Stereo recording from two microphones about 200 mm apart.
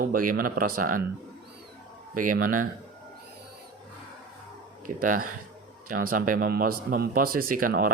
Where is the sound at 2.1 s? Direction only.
45° right (ahead or behind).